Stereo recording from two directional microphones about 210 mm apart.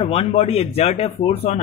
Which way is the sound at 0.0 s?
25° left (ahead or behind).